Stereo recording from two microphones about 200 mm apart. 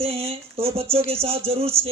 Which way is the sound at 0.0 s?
30° right (ahead or behind).